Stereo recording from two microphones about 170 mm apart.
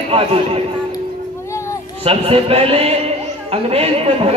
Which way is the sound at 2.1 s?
35° right (ahead or behind).